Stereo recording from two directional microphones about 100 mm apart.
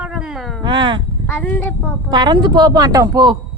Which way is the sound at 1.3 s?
15° left (ahead or behind).